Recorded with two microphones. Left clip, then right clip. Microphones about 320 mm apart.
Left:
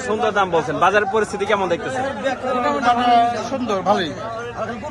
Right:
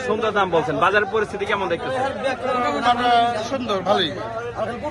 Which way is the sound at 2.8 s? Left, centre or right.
Centre.